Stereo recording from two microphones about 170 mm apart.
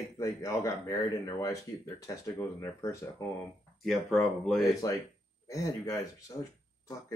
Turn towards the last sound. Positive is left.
turn(degrees=15)  # may be behind; listen again after turning